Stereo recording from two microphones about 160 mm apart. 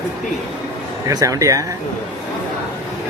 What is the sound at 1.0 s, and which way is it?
Speech, 20° right (ahead or behind).